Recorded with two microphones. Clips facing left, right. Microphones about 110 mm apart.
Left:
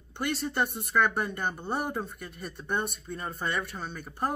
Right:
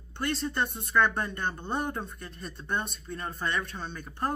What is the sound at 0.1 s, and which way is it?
Speech, 10° left (ahead or behind).